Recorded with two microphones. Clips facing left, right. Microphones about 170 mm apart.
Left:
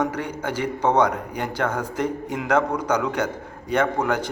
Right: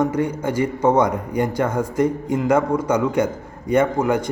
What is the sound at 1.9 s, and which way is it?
Speech, 10° left (ahead or behind).